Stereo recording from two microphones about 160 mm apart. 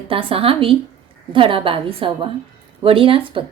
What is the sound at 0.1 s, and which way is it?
A woman's voice, 35° right (ahead or behind).